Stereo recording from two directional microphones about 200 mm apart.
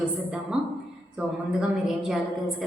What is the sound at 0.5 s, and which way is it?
A woman's voice, 5° right (ahead or behind).